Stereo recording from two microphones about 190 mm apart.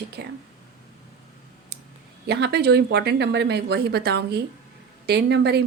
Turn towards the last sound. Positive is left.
turn(degrees=-60)  # may be behind; listen again after turning